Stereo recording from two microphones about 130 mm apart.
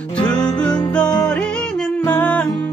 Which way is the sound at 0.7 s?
35° left (ahead or behind).